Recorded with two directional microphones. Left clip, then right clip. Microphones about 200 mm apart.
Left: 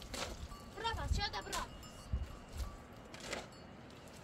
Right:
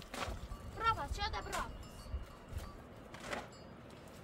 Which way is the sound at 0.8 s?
5° left (ahead or behind).